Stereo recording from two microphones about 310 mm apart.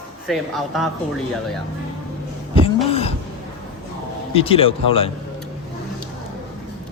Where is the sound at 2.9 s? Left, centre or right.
Centre.